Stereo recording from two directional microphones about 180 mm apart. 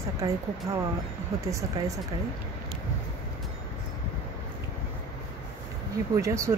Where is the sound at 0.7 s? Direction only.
15° right (ahead or behind).